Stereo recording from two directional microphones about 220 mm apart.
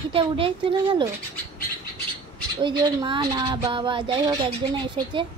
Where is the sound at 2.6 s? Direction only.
20° right (ahead or behind).